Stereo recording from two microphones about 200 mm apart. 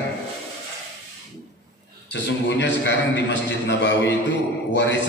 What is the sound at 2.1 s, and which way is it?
A man's voice, 60° left (ahead or behind).